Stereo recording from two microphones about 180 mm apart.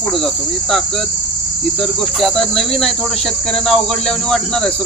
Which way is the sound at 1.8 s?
Centre (ahead or behind).